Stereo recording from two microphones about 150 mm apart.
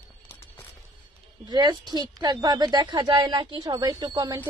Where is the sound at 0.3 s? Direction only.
15° left (ahead or behind).